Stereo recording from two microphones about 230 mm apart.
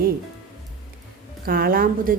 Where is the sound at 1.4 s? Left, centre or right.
Right.